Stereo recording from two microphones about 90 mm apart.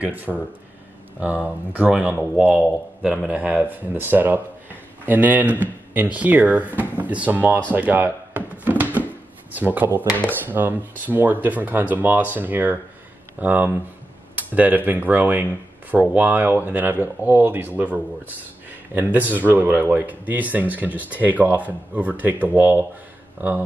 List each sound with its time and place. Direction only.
0.0 s speech: 20° right (ahead or behind)
7.7 s a sound: 20° right (ahead or behind)
9.5 s speech: 20° right (ahead or behind)